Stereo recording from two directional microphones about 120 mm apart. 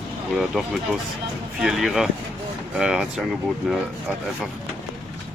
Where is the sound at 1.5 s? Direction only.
Centre (ahead or behind).